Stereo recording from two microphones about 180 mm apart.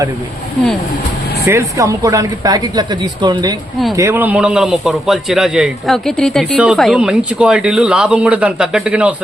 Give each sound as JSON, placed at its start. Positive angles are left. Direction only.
{"t": 1.5, "sound": "speech", "side_deg": -15}
{"t": 3.9, "sound": "a man's voice", "side_deg": -15}